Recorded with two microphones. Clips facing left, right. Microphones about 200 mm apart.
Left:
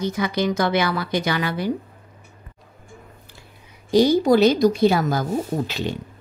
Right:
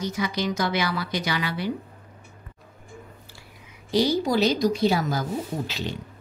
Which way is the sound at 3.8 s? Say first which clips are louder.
Left 7 dB; 50° left (ahead or behind).